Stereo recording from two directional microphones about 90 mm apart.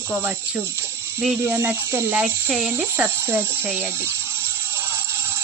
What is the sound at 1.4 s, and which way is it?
Speech, 25° right (ahead or behind).